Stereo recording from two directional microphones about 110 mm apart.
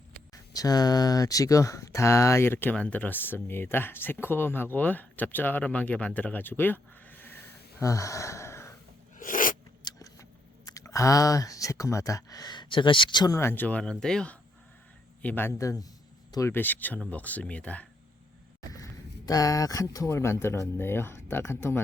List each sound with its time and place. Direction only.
0.5 s speech: 35° left (ahead or behind); by 7.3 s 15° left (ahead or behind)
7.8 s a sound: 30° left (ahead or behind)
9.8 s a sound: 30° left (ahead or behind)
10.7 s speech: 30° left (ahead or behind)
13.3 s speech: 20° left (ahead or behind)
16.5 s speech: 15° left (ahead or behind)
18.7 s speech: 35° left (ahead or behind)